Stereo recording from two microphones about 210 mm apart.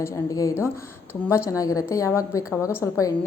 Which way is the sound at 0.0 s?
15° left (ahead or behind).